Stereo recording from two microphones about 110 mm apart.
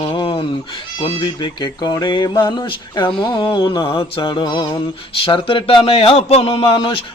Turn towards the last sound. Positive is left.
turn(degrees=50)  # may be behind; listen again after turning